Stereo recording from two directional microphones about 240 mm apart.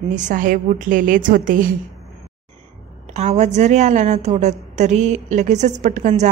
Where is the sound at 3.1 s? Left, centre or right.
Right.